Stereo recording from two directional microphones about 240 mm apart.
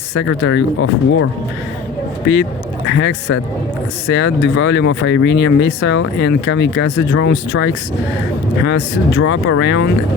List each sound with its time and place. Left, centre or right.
0.1 s speech: left